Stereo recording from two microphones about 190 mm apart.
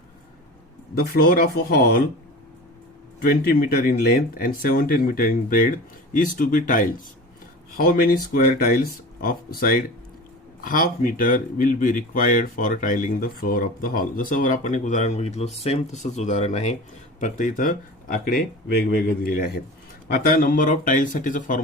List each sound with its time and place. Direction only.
0.9 s speech: 55° left (ahead or behind)
3.2 s speech: 50° left (ahead or behind)